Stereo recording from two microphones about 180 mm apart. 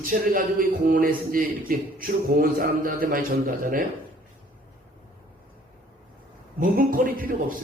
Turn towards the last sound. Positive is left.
turn(degrees=-50)  # may be behind; listen again after turning